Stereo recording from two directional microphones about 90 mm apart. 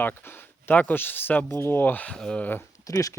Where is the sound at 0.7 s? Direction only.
20° left (ahead or behind).